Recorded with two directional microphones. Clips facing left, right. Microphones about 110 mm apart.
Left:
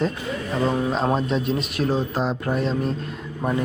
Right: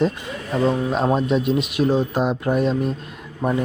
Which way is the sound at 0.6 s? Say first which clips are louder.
Right 3 dB; centre (ahead or behind).